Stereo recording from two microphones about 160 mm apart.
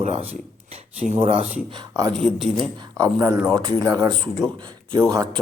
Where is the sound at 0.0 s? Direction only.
40° right (ahead or behind).